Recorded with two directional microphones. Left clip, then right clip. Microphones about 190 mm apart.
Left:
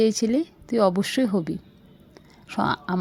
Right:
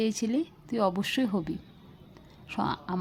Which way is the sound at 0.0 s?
25° left (ahead or behind).